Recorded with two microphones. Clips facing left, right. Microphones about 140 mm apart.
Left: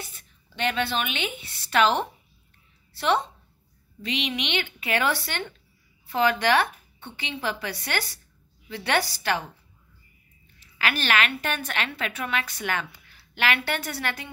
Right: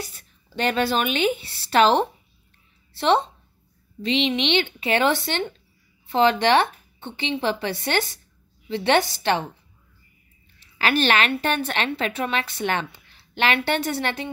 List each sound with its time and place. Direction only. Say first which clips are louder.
0.0 s a woman's voice: right 6 dB; 35° right (ahead or behind)
10.8 s a woman's voice: right 5 dB; 30° right (ahead or behind)